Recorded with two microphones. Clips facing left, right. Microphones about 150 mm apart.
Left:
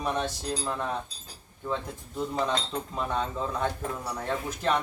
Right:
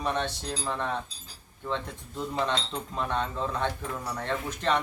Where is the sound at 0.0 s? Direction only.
5° left (ahead or behind).